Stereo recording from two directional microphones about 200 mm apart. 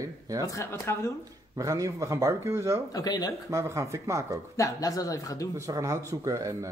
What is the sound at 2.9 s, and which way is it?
Speech, 20° left (ahead or behind).